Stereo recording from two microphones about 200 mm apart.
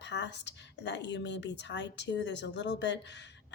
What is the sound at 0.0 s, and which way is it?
Speech, 60° left (ahead or behind).